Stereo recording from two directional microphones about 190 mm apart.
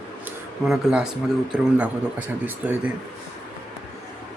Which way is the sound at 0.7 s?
5° right (ahead or behind).